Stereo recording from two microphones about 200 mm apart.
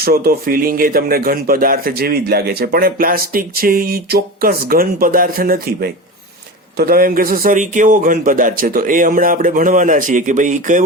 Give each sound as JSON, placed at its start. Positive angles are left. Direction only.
{"t": 0.0, "sound": "speech", "side_deg": -50}